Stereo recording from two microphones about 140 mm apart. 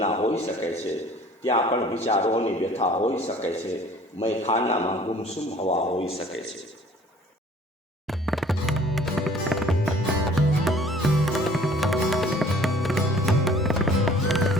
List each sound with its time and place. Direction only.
0.0 s a man's voice: 50° left (ahead or behind)
8.0 s music: centre (ahead or behind)